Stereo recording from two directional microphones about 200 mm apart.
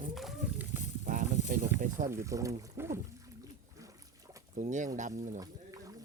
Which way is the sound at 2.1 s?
15° right (ahead or behind).